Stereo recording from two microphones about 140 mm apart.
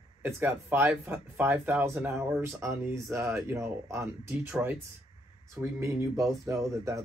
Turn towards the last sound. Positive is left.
turn(degrees=-20)  # may be behind; listen again after turning